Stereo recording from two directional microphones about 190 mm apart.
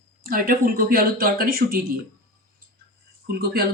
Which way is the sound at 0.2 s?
50° right (ahead or behind).